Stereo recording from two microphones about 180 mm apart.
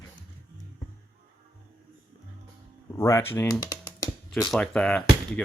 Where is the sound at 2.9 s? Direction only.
15° left (ahead or behind).